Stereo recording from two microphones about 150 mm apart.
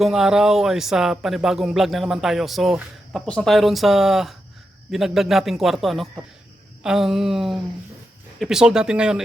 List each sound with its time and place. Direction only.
0.0 s speech: 5° right (ahead or behind)